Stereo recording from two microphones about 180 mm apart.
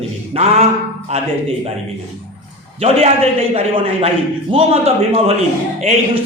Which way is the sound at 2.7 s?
35° right (ahead or behind).